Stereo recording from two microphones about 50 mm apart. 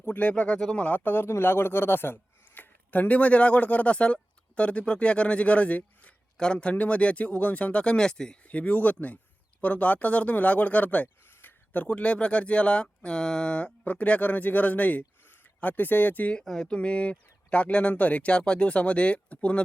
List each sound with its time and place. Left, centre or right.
0.0 s speech: left
2.6 s speech: left
6.3 s speech: centre
8.4 s speech: left
11.3 s a sound: left
11.9 s speech: left
16.4 s a sound: centre
16.6 s speech: left